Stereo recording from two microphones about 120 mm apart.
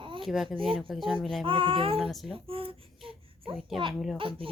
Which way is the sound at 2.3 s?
50° right (ahead or behind).